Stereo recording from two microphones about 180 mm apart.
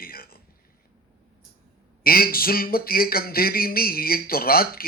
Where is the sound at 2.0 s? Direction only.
55° left (ahead or behind).